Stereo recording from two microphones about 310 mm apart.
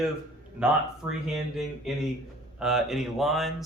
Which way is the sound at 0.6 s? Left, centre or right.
Centre.